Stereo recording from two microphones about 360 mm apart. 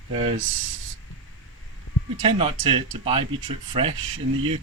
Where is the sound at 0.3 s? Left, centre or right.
Right.